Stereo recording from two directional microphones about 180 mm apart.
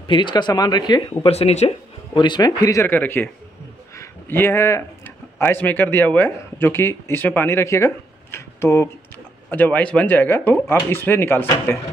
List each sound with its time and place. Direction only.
0.0 s speech: 25° left (ahead or behind)
1.3 s speech: 35° left (ahead or behind)
2.1 s speech: 25° left (ahead or behind)